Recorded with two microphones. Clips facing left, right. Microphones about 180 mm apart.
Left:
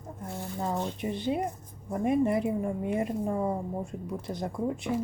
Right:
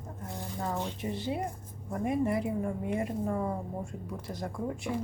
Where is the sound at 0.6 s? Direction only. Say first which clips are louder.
Left 3 dB; 15° left (ahead or behind).